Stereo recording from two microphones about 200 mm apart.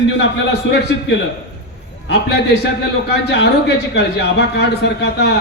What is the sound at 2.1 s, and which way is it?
Speech, 55° left (ahead or behind).